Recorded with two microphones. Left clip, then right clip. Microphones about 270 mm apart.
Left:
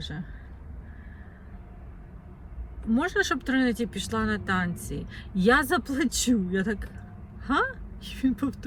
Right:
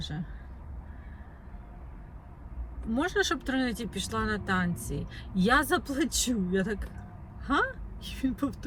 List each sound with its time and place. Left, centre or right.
2.9 s speech: centre